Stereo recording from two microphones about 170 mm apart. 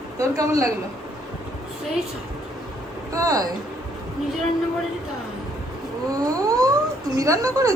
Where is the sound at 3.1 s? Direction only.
20° right (ahead or behind).